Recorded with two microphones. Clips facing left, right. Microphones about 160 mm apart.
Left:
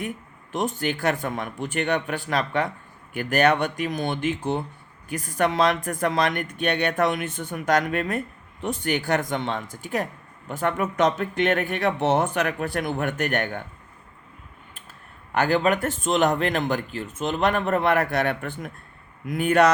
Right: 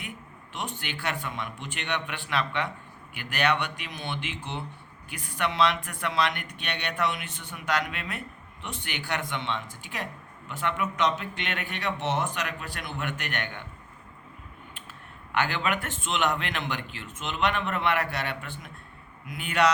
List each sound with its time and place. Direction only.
0.5 s speech: 45° left (ahead or behind)
15.3 s speech: 40° left (ahead or behind)